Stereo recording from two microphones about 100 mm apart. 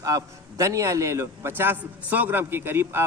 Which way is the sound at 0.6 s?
30° right (ahead or behind).